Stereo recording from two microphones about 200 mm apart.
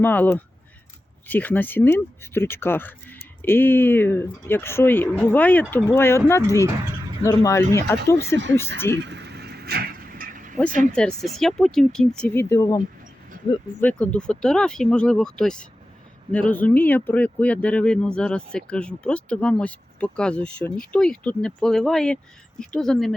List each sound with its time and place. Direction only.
0.0 s speech: 10° left (ahead or behind)
9.0 s vehicle: 60° right (ahead or behind); by 10.6 s 40° right (ahead or behind)
10.9 s speech: 5° left (ahead or behind)
13.8 s speech: 5° left (ahead or behind)